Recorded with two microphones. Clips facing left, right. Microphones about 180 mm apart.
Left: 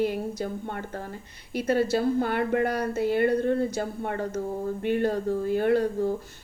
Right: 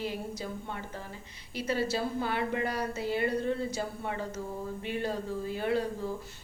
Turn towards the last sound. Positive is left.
turn(degrees=55)  # may be behind; listen again after turning